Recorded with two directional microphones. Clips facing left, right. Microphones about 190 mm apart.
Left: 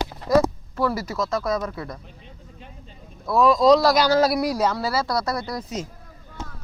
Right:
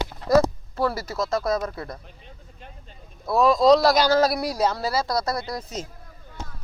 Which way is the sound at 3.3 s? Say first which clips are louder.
Left 1 dB; 30° right (ahead or behind).